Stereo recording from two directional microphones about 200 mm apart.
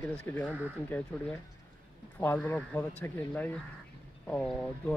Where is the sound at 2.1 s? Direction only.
5° left (ahead or behind).